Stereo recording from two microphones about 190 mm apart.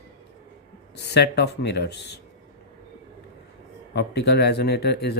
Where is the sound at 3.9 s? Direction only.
60° left (ahead or behind).